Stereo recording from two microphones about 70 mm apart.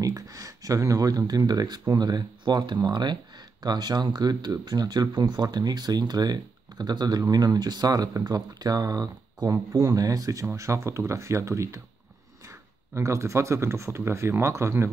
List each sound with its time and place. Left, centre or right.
0.0 s speech: right
3.6 s speech: right